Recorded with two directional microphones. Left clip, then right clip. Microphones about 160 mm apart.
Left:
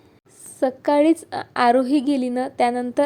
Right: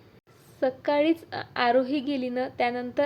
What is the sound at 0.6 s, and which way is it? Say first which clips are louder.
A woman's voice: left 6 dB; 35° left (ahead or behind).